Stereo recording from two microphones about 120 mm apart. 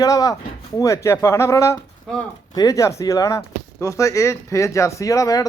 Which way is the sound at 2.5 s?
30° left (ahead or behind).